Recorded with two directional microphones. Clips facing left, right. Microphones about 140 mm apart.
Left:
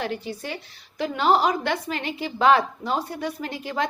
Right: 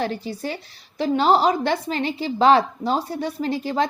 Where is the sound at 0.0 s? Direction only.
35° right (ahead or behind).